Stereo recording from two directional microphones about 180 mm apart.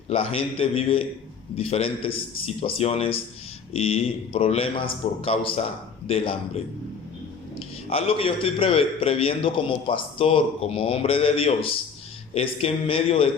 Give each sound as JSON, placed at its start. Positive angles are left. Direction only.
{"t": 0.1, "sound": "a man's voice", "side_deg": 30}
{"t": 7.9, "sound": "a man's voice", "side_deg": 30}